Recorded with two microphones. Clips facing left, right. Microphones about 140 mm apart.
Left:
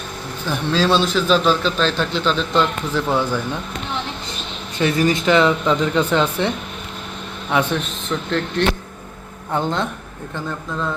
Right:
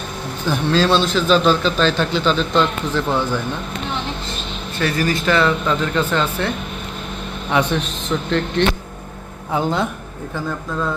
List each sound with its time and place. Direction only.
0.4 s a man's voice: centre (ahead or behind)
4.8 s speech: 20° left (ahead or behind)
7.5 s a man's voice: centre (ahead or behind)